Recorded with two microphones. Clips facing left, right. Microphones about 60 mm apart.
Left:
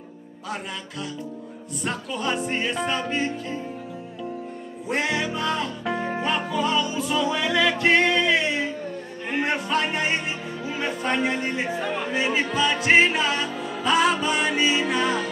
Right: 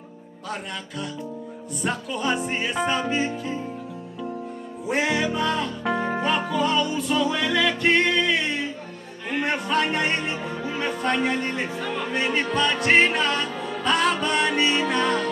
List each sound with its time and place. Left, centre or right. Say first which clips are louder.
1.8 s music: right 2 dB; centre
4.8 s music: right 2 dB; centre
9.3 s speech: even; centre